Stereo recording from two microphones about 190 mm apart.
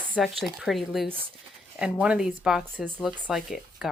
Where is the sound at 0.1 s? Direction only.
Centre (ahead or behind).